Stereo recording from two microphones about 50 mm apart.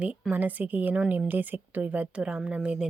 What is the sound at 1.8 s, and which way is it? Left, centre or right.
A woman's voice, right.